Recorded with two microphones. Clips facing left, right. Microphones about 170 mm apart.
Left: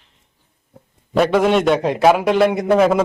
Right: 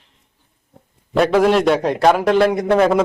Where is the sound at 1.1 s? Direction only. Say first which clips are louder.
Right 1 dB; centre (ahead or behind).